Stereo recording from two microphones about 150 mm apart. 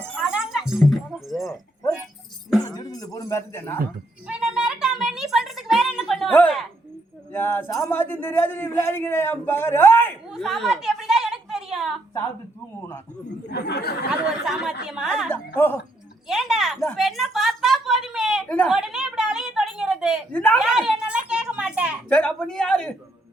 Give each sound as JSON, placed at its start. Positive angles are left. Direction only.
{"t": 0.2, "sound": "music", "side_deg": -5}
{"t": 2.6, "sound": "music", "side_deg": 25}
{"t": 4.3, "sound": "a sound", "side_deg": -5}
{"t": 7.3, "sound": "a man's voice", "side_deg": 15}
{"t": 10.2, "sound": "a sound", "side_deg": 0}
{"t": 13.5, "sound": "speech", "side_deg": 90}
{"t": 14.4, "sound": "a woman's voice", "side_deg": 0}
{"t": 15.3, "sound": "a man's voice", "side_deg": 15}
{"t": 16.2, "sound": "a sound", "side_deg": 0}
{"t": 20.3, "sound": "a man's voice", "side_deg": 10}
{"t": 20.6, "sound": "a sound", "side_deg": -5}
{"t": 22.1, "sound": "a woman's voice", "side_deg": 5}